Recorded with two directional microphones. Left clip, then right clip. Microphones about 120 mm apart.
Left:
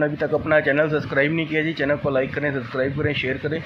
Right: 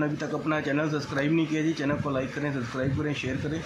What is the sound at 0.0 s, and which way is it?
Speech, 35° left (ahead or behind).